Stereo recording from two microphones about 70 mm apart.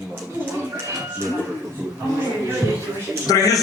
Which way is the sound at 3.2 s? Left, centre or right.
Left.